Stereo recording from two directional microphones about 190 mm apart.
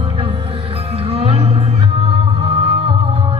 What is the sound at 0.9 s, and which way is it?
Music, 30° right (ahead or behind).